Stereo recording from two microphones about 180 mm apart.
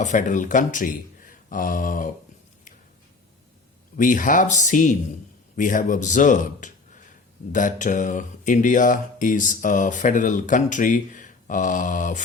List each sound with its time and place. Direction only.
0.0 s speech: 45° left (ahead or behind)
3.9 s a man's voice: 45° left (ahead or behind)